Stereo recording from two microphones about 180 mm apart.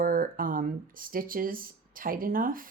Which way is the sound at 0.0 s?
50° right (ahead or behind).